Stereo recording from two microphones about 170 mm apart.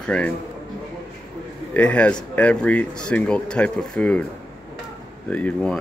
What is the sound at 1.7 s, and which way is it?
Speech, 5° left (ahead or behind).